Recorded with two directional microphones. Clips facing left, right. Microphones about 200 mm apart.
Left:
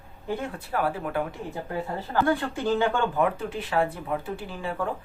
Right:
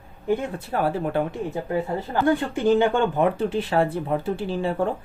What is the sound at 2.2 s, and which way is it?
Speech, 20° right (ahead or behind).